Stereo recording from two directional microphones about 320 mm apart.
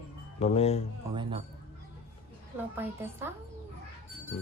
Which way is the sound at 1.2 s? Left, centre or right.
Centre.